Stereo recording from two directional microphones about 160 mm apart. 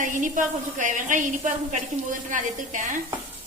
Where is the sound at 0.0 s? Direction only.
55° right (ahead or behind).